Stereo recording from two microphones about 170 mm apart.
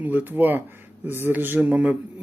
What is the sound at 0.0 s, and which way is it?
Speech, 10° right (ahead or behind).